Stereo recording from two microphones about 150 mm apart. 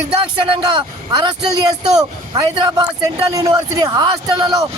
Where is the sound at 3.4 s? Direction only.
25° right (ahead or behind).